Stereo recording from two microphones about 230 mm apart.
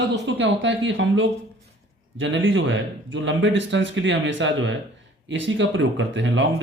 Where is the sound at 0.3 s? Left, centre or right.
Right.